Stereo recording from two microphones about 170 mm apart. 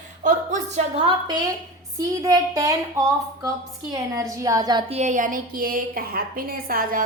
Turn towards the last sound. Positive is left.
turn(degrees=-60)  # may be behind; listen again after turning